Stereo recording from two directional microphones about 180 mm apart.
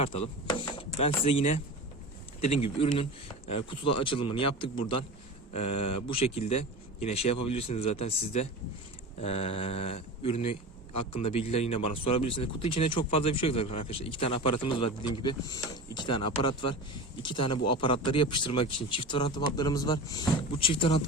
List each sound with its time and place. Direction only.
0.0 s a man's voice: 35° left (ahead or behind)
2.7 s a man's voice: 30° left (ahead or behind)